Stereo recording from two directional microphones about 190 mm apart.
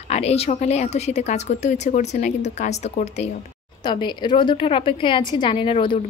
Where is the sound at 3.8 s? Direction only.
25° left (ahead or behind).